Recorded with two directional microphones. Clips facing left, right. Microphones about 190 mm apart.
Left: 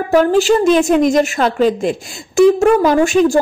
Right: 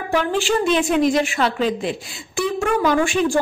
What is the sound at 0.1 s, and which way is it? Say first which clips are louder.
A woman's voice: left 8 dB; 40° left (ahead or behind).